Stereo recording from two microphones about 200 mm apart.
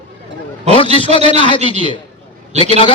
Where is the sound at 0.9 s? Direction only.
25° left (ahead or behind).